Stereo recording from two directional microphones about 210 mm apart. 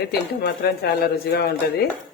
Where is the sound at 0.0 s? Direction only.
45° left (ahead or behind).